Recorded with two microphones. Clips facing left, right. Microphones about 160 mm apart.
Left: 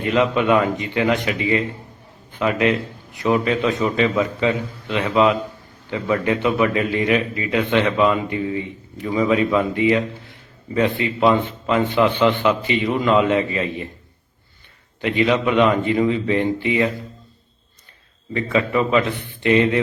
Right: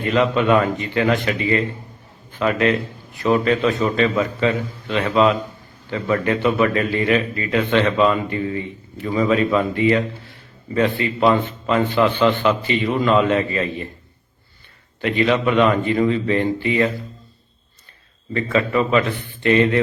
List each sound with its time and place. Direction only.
0.1 s a man's voice: 15° left (ahead or behind)
15.0 s a man's voice: 15° left (ahead or behind)
18.5 s a man's voice: 15° left (ahead or behind)